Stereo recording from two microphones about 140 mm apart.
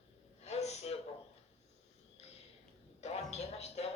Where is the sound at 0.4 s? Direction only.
50° left (ahead or behind).